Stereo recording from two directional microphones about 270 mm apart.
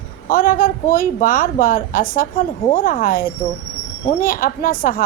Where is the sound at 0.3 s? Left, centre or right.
Left.